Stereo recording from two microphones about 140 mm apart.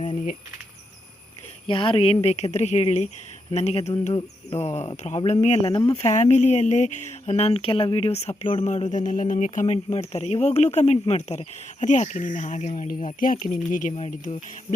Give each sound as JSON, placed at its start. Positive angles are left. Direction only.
{"t": 1.6, "sound": "speech", "side_deg": 40}
{"t": 2.2, "sound": "speech", "side_deg": 50}
{"t": 8.6, "sound": "speech", "side_deg": 60}
{"t": 9.7, "sound": "speech", "side_deg": 45}
{"t": 13.1, "sound": "speech", "side_deg": 70}